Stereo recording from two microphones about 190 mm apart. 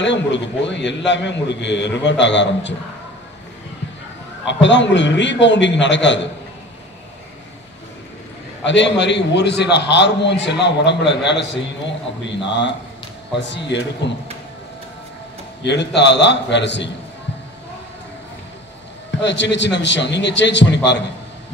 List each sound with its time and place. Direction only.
0.0 s a man's voice: 70° left (ahead or behind)
4.5 s a man's voice: 70° left (ahead or behind)
8.6 s a man's voice: 70° left (ahead or behind)
13.5 s a man's voice: 65° left (ahead or behind)
15.6 s a man's voice: 65° left (ahead or behind)
19.1 s a man's voice: 65° left (ahead or behind)